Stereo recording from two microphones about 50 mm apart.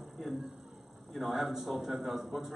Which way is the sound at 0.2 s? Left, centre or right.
Centre.